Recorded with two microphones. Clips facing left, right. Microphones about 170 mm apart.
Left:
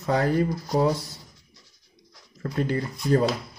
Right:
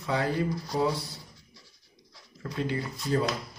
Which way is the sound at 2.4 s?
45° left (ahead or behind).